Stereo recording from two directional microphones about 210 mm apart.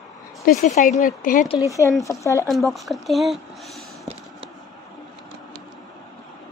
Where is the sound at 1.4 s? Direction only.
15° left (ahead or behind).